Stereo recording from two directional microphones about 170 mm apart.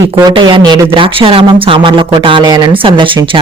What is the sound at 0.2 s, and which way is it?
Speech, 25° right (ahead or behind).